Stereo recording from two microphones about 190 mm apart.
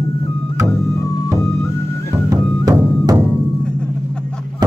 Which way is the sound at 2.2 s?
20° right (ahead or behind).